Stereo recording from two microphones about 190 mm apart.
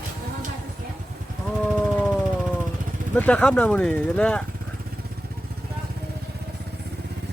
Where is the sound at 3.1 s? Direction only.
5° left (ahead or behind).